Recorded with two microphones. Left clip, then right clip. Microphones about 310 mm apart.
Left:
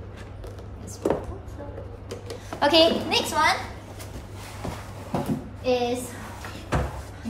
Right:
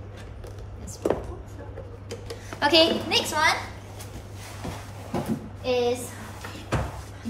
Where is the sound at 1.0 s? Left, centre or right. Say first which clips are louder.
Left 1 dB; centre.